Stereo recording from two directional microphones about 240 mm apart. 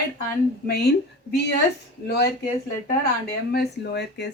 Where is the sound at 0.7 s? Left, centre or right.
Left.